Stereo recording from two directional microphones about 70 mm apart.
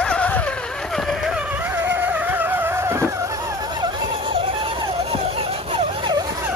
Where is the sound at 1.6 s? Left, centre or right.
Right.